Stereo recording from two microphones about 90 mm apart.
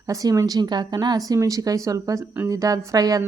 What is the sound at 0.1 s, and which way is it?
A woman's voice, 40° right (ahead or behind).